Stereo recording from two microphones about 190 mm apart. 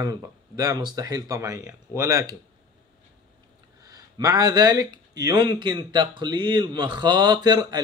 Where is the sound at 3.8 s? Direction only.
20° right (ahead or behind).